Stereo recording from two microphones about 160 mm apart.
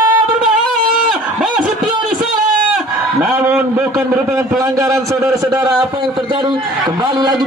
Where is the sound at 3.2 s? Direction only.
10° right (ahead or behind).